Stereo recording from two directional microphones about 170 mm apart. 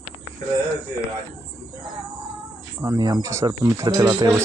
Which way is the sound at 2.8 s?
20° right (ahead or behind).